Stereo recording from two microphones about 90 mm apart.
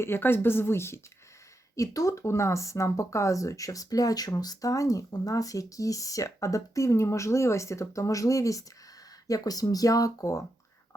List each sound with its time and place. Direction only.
0.0 s speech: 25° left (ahead or behind)
1.7 s speech: 40° left (ahead or behind)